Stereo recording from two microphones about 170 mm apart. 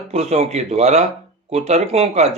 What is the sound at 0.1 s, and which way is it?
Speech, 40° right (ahead or behind).